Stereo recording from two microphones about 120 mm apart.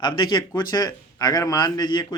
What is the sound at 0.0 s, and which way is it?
Speech, 40° left (ahead or behind).